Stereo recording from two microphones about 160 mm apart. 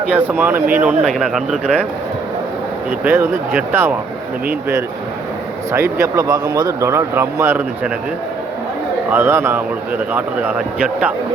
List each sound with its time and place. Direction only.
0.1 s speech: 10° right (ahead or behind)
3.0 s speech: 15° right (ahead or behind)
5.7 s speech: 15° right (ahead or behind)
9.0 s speech: 15° right (ahead or behind)